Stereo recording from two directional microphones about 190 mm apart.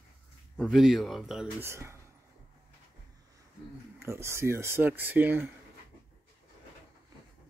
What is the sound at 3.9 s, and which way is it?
Speech, 15° right (ahead or behind).